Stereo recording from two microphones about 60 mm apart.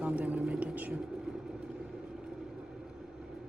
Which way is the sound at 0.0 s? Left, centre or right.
Right.